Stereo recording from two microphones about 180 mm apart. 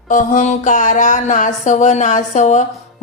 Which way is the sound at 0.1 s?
45° left (ahead or behind).